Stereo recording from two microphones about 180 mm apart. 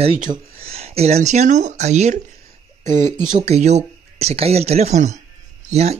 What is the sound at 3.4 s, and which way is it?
Speech, 35° right (ahead or behind).